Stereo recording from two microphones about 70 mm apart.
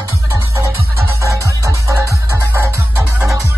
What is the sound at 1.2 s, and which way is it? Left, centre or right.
Music, right.